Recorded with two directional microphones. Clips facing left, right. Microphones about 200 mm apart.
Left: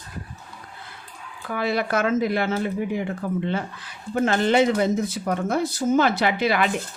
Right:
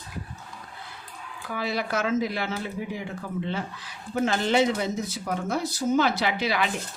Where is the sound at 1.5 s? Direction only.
55° left (ahead or behind).